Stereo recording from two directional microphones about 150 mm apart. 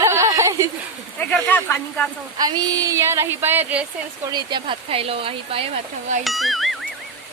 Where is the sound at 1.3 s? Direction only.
15° left (ahead or behind).